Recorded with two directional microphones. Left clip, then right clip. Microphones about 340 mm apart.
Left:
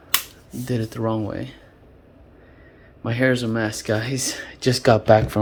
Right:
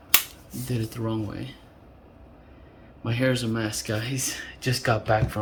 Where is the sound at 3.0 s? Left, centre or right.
Centre.